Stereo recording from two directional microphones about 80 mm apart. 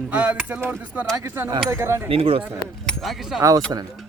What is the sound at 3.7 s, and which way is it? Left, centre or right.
Speech, right.